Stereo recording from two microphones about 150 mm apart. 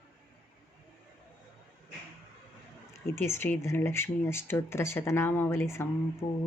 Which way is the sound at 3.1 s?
15° left (ahead or behind).